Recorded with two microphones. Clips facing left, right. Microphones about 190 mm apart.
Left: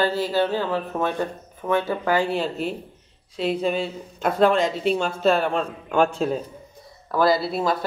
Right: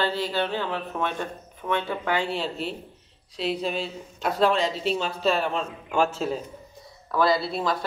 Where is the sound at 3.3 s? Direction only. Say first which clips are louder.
Left 4 dB; 50° left (ahead or behind).